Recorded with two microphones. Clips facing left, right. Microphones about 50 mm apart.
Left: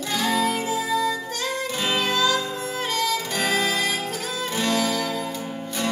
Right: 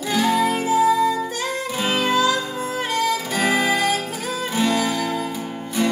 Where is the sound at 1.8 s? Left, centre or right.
Centre.